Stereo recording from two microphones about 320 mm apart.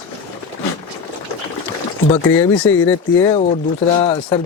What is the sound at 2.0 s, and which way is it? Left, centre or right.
Speech, centre.